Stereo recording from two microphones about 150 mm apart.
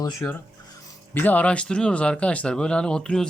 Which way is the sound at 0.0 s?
20° left (ahead or behind).